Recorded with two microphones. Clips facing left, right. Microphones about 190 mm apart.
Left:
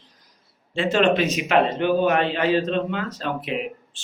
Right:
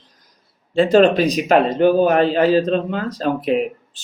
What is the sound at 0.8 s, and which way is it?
A man's voice, 35° right (ahead or behind).